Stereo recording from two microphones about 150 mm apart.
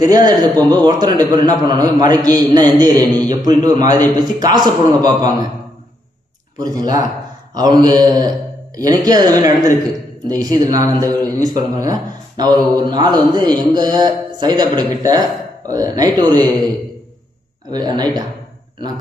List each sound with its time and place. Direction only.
0.0 s a man's voice: 25° right (ahead or behind)
7.5 s a man's voice: 25° right (ahead or behind)